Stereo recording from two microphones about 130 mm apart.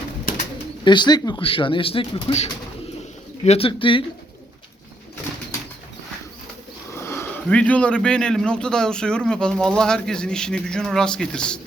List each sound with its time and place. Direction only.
0.9 s speech: 35° left (ahead or behind)
3.4 s speech: 55° left (ahead or behind)
3.7 s speech: 40° left (ahead or behind)
6.9 s speech: 20° left (ahead or behind)